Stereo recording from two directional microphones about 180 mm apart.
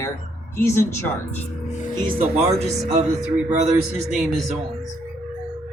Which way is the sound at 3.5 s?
40° right (ahead or behind).